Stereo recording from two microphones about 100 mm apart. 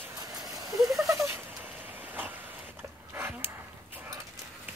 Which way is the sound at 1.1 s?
25° right (ahead or behind).